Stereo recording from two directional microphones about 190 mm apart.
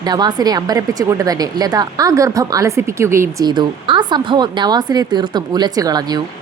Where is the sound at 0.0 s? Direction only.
20° right (ahead or behind).